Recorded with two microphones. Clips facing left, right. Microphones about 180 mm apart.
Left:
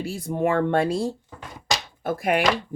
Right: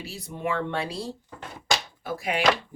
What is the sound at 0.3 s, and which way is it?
Speech, 50° left (ahead or behind).